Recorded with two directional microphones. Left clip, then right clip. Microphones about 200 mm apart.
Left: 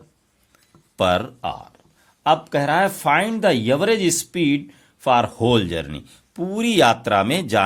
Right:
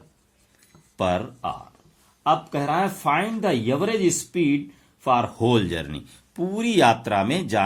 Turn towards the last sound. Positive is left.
turn(degrees=35)  # may be behind; listen again after turning